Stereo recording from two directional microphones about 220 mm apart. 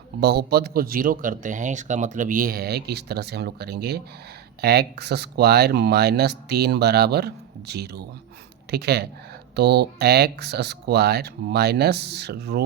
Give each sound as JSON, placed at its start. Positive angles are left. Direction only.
{"t": 0.2, "sound": "speech", "side_deg": -45}